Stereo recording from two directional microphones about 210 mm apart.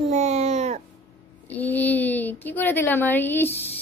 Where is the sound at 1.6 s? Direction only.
10° left (ahead or behind).